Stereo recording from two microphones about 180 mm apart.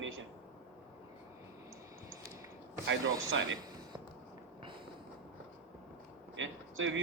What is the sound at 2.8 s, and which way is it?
Speech, 90° right.